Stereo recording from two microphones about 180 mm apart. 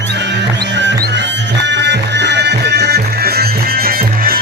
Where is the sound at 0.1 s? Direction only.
75° right (ahead or behind).